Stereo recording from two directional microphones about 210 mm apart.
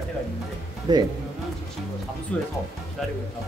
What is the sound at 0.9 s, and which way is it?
Speech, 20° right (ahead or behind).